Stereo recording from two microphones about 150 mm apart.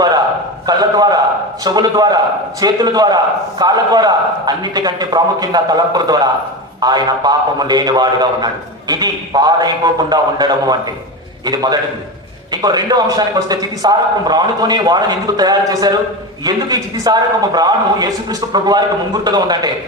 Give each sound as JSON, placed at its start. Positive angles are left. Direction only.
{"t": 0.7, "sound": "a man's voice", "side_deg": -25}